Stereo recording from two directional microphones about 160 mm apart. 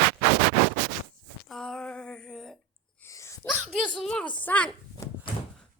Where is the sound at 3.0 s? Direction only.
20° left (ahead or behind).